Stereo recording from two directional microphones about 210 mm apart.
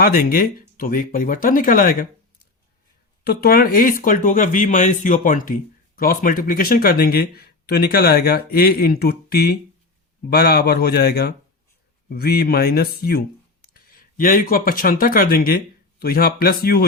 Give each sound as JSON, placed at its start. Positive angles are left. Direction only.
{"t": 0.0, "sound": "speech", "side_deg": 45}
{"t": 3.2, "sound": "speech", "side_deg": 45}